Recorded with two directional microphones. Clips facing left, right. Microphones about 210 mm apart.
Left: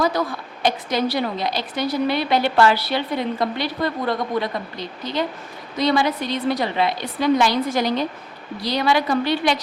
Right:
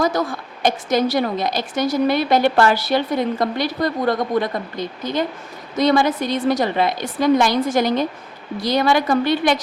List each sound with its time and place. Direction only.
0.0 s a woman's voice: 45° right (ahead or behind)